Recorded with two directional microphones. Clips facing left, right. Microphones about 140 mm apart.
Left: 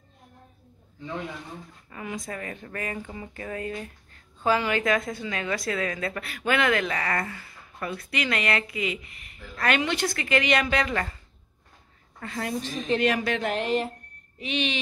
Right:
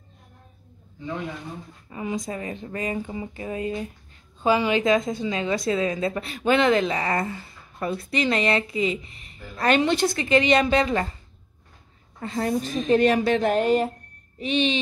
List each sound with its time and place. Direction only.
1.9 s speech: 20° right (ahead or behind)
12.2 s a woman's voice: 30° right (ahead or behind)